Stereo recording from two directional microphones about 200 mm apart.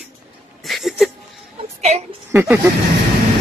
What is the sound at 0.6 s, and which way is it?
Speech, centre (ahead or behind).